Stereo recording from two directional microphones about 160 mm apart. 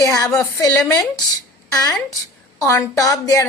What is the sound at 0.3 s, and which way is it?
Speech, 20° left (ahead or behind).